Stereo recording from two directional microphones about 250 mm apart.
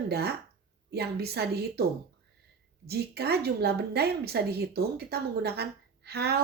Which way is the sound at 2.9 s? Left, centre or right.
Right.